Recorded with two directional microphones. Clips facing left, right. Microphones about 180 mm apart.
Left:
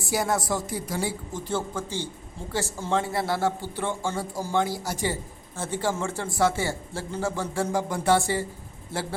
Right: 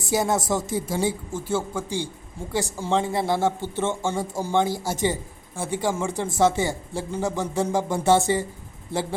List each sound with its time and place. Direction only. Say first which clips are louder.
0.0 s speech: right 3 dB; 20° right (ahead or behind)
1.3 s speech: right 3 dB; 10° right (ahead or behind)